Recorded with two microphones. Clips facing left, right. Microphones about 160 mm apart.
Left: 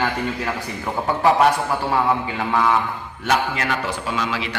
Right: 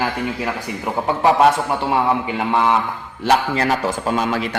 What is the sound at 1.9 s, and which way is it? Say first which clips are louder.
Speech: right 2 dB; 20° right (ahead or behind).